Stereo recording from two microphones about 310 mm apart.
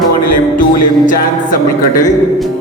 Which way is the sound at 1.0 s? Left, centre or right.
Left.